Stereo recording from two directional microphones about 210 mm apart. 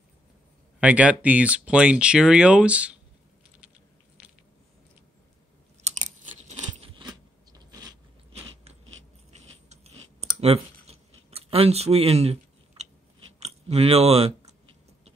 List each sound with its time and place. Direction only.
0.7 s speech: 5° right (ahead or behind)
4.2 s biting: 5° right (ahead or behind)
5.9 s chewing: 35° right (ahead or behind)
6.8 s a sound: 20° right (ahead or behind)
8.3 s biting: 30° right (ahead or behind)
10.4 s a sound: 30° right (ahead or behind)
13.4 s speech: 30° right (ahead or behind)